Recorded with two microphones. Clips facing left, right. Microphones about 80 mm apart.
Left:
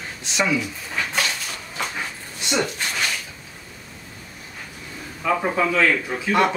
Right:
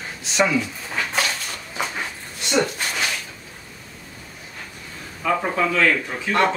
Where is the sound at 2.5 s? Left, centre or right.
Centre.